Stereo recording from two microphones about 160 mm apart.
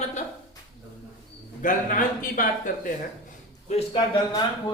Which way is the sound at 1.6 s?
55° left (ahead or behind).